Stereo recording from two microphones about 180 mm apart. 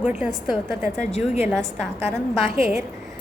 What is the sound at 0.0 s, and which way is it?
Speech, 5° right (ahead or behind).